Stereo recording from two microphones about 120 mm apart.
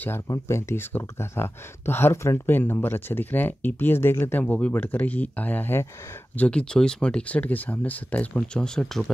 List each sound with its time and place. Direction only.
0.3 s speech: 20° left (ahead or behind); by 9.1 s 5° left (ahead or behind)